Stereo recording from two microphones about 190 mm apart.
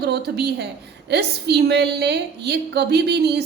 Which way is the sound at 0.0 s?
60° right (ahead or behind).